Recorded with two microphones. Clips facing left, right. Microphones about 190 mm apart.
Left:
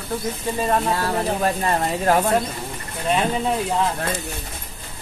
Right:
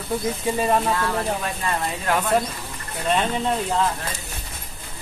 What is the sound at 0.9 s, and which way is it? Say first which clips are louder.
Speech: left 2 dB; 40° left (ahead or behind).